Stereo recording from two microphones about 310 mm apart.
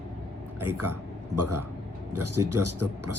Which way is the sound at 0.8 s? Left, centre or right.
Right.